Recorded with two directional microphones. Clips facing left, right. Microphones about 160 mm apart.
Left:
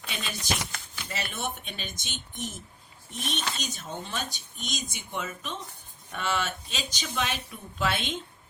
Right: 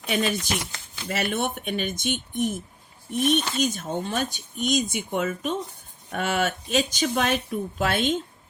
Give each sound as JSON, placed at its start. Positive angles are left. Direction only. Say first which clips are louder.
{"t": 0.1, "sound": "speech", "louder": "right 9 dB", "side_deg": -55}